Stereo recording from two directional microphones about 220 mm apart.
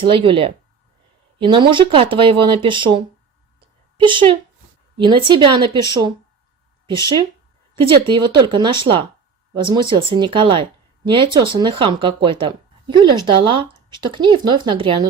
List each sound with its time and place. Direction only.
0.0 s speech: 25° right (ahead or behind)
4.0 s speech: 20° right (ahead or behind)